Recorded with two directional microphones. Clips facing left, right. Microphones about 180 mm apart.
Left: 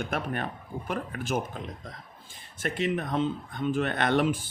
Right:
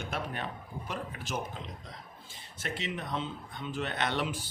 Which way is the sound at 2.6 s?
50° left (ahead or behind).